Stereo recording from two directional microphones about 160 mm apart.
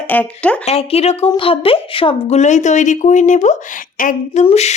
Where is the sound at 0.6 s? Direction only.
40° left (ahead or behind).